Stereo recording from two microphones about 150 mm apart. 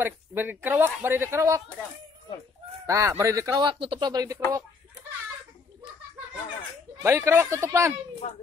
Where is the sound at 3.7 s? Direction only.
35° right (ahead or behind).